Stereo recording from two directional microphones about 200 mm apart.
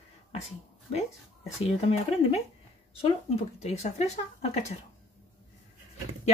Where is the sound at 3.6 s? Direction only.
35° left (ahead or behind).